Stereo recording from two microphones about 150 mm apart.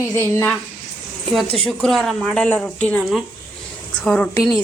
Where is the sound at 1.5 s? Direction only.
Centre (ahead or behind).